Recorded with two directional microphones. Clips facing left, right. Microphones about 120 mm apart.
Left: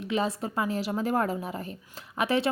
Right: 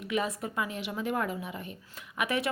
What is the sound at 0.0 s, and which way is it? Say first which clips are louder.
A woman's voice: left 3 dB; 30° left (ahead or behind).